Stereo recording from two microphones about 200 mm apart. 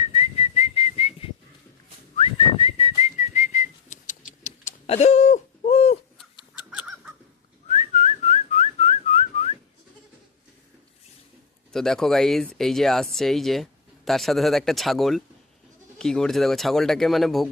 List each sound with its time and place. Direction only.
0.0 s whistling: 30° left (ahead or behind)
6.7 s chicken: 5° right (ahead or behind)
7.7 s whistling: 35° left (ahead or behind)
11.7 s speech: centre (ahead or behind)